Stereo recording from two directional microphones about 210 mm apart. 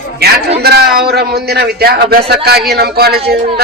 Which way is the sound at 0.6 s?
50° right (ahead or behind).